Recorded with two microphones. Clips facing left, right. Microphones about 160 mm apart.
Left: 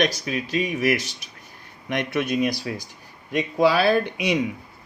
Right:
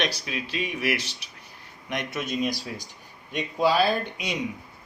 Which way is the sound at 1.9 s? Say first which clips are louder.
Left 6 dB; 60° left (ahead or behind).